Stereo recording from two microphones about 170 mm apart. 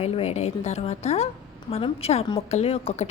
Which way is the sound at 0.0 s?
40° left (ahead or behind).